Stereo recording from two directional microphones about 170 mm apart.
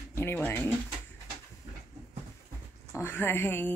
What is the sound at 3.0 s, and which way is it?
Speech, 10° left (ahead or behind).